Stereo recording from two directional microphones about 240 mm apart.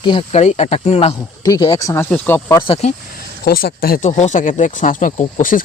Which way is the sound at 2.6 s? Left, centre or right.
Left.